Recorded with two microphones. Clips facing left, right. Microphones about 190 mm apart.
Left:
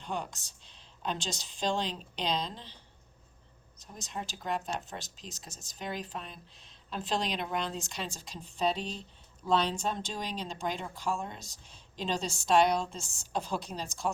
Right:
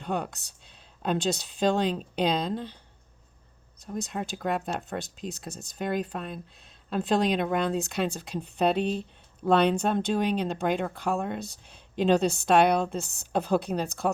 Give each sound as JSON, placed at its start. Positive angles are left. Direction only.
{"t": 0.0, "sound": "speech", "side_deg": -60}
{"t": 3.9, "sound": "speech", "side_deg": -60}